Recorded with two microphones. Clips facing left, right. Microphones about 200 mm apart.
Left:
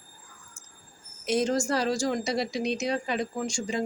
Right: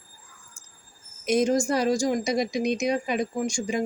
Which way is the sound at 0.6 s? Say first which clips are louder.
Left 2 dB; 5° left (ahead or behind).